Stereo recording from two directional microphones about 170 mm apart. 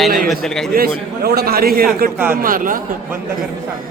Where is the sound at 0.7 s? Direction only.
65° right (ahead or behind).